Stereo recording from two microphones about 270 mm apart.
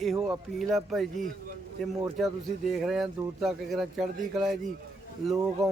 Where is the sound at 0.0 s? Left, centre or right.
Centre.